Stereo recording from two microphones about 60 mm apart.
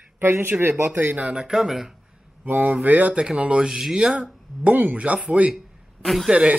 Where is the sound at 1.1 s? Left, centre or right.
Right.